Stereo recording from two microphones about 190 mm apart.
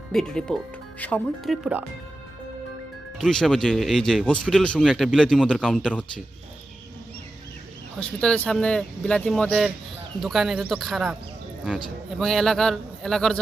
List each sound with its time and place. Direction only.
0.1 s speech: 5° left (ahead or behind)
3.2 s speech: centre (ahead or behind)
7.9 s speech: 5° left (ahead or behind)
12.2 s speech: centre (ahead or behind)